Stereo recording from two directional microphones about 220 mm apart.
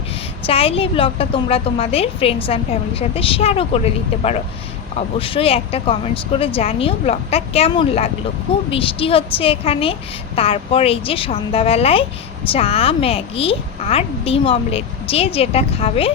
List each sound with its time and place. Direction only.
0.4 s a woman's voice: 25° left (ahead or behind)
4.9 s a woman's voice: 25° left (ahead or behind)